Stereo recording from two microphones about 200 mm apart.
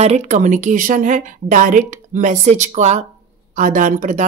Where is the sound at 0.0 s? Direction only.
35° right (ahead or behind).